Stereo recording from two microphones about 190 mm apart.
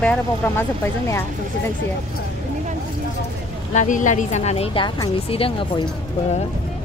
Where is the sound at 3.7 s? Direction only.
40° left (ahead or behind).